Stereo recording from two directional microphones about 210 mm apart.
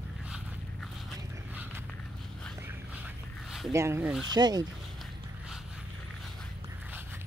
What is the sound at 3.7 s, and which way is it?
Speech, 15° right (ahead or behind).